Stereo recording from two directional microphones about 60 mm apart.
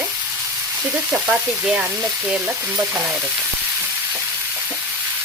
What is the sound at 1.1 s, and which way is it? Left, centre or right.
Frying, right.